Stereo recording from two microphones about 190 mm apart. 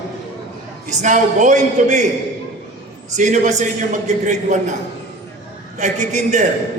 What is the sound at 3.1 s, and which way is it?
Speech, 40° right (ahead or behind).